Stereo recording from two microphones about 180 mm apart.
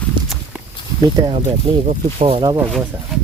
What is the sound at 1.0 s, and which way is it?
Speech, 25° right (ahead or behind).